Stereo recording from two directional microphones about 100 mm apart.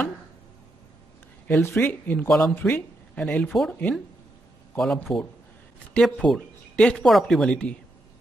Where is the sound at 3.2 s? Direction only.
10° left (ahead or behind).